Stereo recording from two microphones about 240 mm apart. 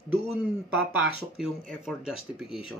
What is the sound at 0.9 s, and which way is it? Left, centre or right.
Speech, centre.